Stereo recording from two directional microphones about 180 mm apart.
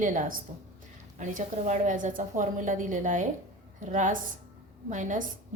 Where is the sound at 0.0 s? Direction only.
45° right (ahead or behind).